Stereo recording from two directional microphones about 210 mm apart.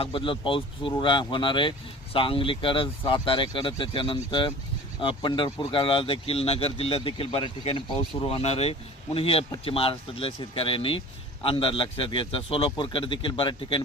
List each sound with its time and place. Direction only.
0.0 s speech: 25° left (ahead or behind)